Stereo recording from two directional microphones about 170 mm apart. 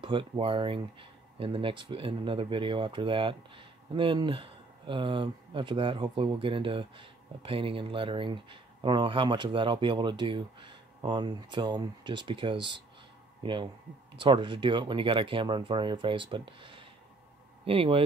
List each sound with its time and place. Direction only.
0.0 s speech: 30° right (ahead or behind)